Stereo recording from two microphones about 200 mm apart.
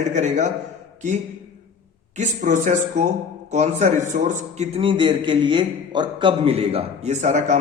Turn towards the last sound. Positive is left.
turn(degrees=-35)  # may be behind; listen again after turning